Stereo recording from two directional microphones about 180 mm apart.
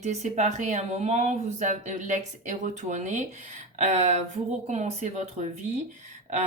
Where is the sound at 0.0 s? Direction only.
40° right (ahead or behind).